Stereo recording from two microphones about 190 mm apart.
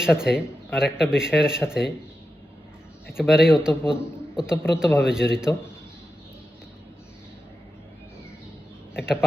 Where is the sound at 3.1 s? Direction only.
5° right (ahead or behind).